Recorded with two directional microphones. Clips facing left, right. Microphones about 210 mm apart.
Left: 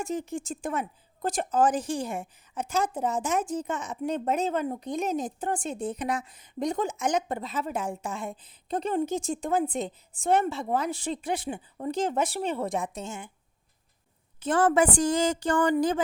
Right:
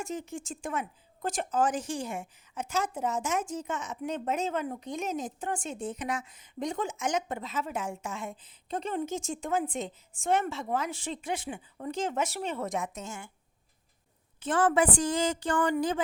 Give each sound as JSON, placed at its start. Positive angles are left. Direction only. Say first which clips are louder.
{"t": 0.0, "sound": "speech", "louder": "left 5 dB", "side_deg": 35}
{"t": 14.3, "sound": "speech", "louder": "left 3 dB", "side_deg": 40}